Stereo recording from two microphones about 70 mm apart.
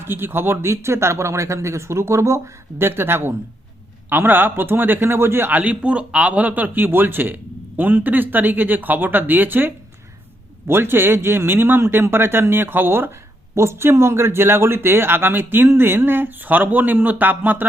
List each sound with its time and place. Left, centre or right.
0.0 s a man's voice: right